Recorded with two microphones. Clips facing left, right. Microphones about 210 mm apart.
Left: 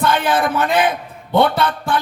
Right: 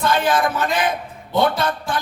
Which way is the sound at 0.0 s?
60° left (ahead or behind).